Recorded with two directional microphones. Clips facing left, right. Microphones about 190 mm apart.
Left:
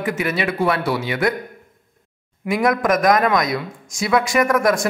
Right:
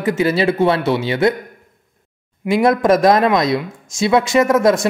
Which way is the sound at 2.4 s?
25° right (ahead or behind).